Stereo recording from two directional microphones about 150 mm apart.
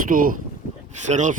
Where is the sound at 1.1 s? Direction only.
55° right (ahead or behind).